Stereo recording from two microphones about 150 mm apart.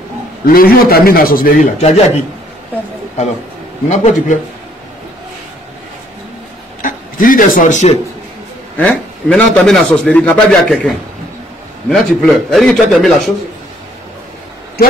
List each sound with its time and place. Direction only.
0.5 s a man's voice: 85° left; by 1.7 s 70° left (ahead or behind)
1.8 s speech: 45° left (ahead or behind)
3.9 s speech: 50° left (ahead or behind)
6.8 s speech: 65° left (ahead or behind)
8.7 s a man's voice: 10° left (ahead or behind)